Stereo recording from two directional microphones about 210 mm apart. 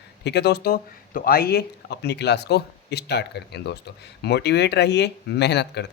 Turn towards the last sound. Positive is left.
turn(degrees=55)  # may be behind; listen again after turning